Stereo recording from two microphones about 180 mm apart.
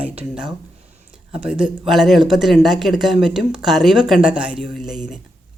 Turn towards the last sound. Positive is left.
turn(degrees=0)  # may be behind; listen again after turning